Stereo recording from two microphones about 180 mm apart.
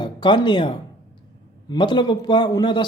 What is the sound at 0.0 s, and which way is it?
A man's voice, 25° left (ahead or behind).